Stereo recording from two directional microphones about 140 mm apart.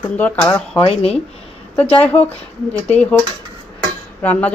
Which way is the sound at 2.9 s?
10° left (ahead or behind).